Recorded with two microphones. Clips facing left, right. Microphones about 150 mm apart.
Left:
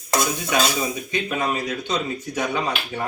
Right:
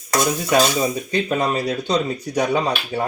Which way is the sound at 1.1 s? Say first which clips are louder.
Right 3 dB; 35° right (ahead or behind).